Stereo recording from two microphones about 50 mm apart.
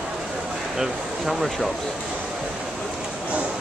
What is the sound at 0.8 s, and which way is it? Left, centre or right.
Speech, centre.